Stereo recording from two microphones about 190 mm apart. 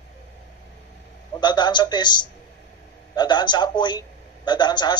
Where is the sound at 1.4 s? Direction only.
25° left (ahead or behind).